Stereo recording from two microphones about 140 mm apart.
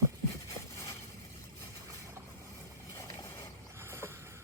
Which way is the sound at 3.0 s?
25° left (ahead or behind).